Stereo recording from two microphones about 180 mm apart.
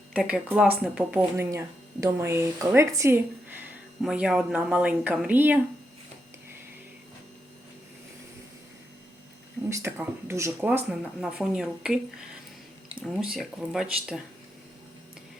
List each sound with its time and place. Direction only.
0.1 s a woman's voice: centre (ahead or behind)
1.4 s a woman's voice: 15° right (ahead or behind)
9.6 s a woman's voice: 15° right (ahead or behind)